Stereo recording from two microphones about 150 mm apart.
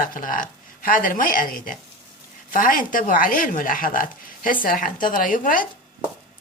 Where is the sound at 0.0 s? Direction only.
65° left (ahead or behind).